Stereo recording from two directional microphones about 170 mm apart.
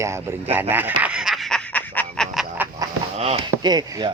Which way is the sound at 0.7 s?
10° right (ahead or behind).